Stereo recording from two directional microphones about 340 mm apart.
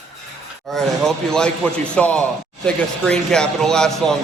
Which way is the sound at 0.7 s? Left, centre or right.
Centre.